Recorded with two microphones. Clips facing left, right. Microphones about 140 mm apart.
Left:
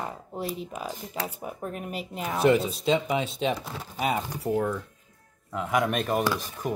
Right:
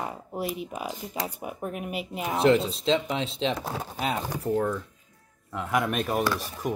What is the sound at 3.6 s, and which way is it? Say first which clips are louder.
Speech: right 5 dB; 45° right (ahead or behind).